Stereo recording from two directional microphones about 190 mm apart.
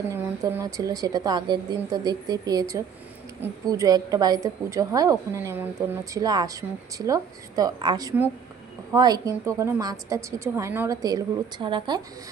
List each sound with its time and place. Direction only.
0.1 s a woman's voice: 15° right (ahead or behind)